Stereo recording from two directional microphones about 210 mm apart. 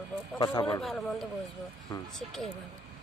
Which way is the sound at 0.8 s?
Centre (ahead or behind).